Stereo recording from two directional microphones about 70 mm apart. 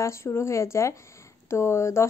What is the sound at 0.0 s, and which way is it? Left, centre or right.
Speech, left.